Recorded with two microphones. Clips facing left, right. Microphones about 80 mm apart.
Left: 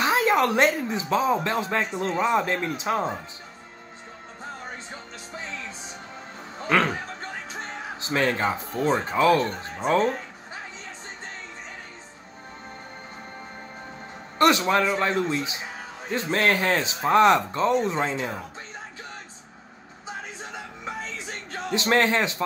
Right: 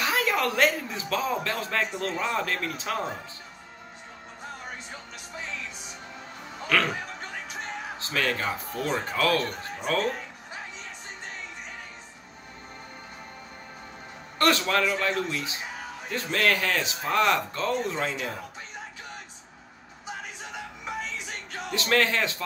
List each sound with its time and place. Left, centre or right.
0.0 s speech: left
6.7 s speech: left
8.0 s speech: left
14.7 s speech: left
20.8 s music: left